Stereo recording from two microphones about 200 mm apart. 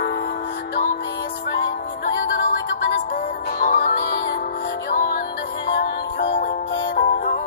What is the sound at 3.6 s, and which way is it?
Music, 40° left (ahead or behind).